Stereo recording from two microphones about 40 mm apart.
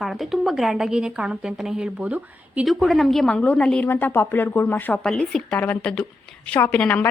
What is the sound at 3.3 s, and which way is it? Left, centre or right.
Speech, left.